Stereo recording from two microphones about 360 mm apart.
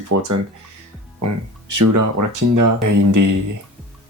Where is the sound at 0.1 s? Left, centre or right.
Right.